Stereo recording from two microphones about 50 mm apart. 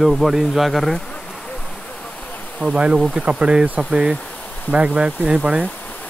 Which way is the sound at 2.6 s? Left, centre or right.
Right.